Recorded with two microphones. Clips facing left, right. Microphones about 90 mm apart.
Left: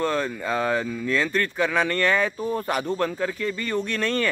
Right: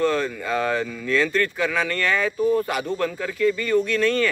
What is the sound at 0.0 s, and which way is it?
Speech, 20° left (ahead or behind).